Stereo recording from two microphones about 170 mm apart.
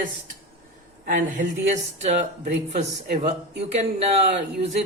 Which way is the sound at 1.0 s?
50° right (ahead or behind).